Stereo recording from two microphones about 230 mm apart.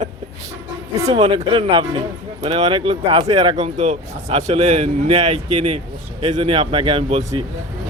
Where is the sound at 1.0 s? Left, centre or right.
Right.